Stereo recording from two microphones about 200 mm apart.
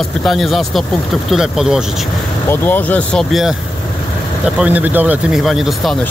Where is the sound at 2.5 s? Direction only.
10° left (ahead or behind).